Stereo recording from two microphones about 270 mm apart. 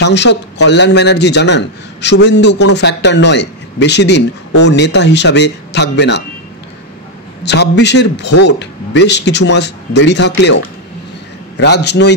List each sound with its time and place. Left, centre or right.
0.0 s speech: left
7.4 s speech: left